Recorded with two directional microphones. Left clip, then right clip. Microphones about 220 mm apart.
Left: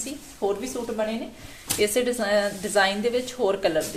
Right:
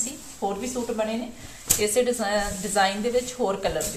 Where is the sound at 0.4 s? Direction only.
40° left (ahead or behind).